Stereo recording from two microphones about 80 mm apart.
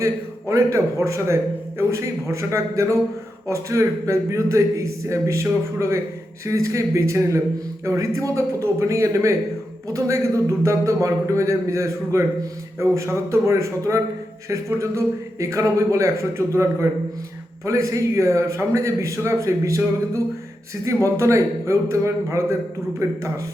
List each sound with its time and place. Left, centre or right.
0.0 s a man's voice: right
17.7 s a man's voice: right